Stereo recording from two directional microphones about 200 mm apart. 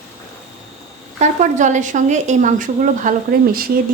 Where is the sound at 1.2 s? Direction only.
40° right (ahead or behind).